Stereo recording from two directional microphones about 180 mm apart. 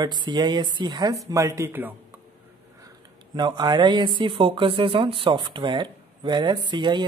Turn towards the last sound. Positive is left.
turn(degrees=-25)  # may be behind; listen again after turning